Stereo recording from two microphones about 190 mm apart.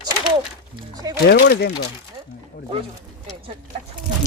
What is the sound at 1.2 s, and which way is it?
Speech, 55° left (ahead or behind).